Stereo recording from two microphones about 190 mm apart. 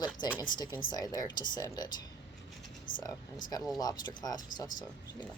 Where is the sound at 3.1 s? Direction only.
20° left (ahead or behind).